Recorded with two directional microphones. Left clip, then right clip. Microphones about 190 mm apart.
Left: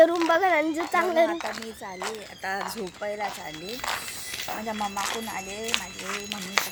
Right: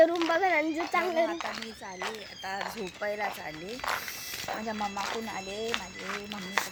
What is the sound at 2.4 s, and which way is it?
Speech, 50° left (ahead or behind).